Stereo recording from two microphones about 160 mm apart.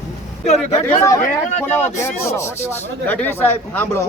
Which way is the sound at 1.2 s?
50° left (ahead or behind).